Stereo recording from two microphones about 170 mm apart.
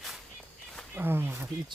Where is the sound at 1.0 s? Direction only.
15° right (ahead or behind).